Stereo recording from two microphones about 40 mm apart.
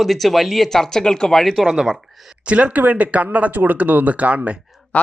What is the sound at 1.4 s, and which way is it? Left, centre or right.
Speech, centre.